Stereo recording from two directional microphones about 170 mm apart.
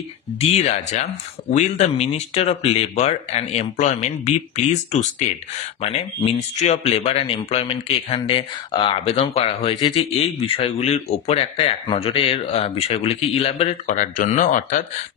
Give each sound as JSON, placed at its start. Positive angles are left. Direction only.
{"t": 0.4, "sound": "speech", "side_deg": 40}
{"t": 5.8, "sound": "speech", "side_deg": 35}
{"t": 13.8, "sound": "speech", "side_deg": 50}